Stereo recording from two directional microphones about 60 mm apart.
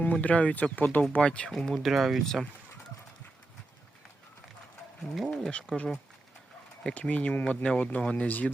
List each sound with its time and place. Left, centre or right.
0.0 s speech: left
1.8 s speech: centre
2.2 s speech: centre
5.4 s speech: centre